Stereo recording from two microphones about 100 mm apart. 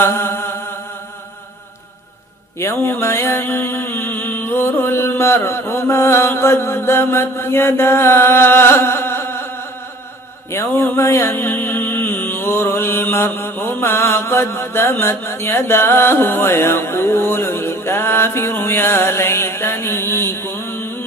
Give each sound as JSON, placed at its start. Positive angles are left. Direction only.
{"t": 0.0, "sound": "music", "side_deg": 25}
{"t": 2.6, "sound": "mantra", "side_deg": 25}
{"t": 10.5, "sound": "mantra", "side_deg": 25}